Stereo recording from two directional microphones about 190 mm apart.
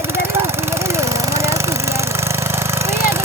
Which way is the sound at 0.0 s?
15° right (ahead or behind).